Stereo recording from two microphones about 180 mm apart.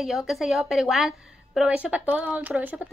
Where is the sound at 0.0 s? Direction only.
Centre (ahead or behind).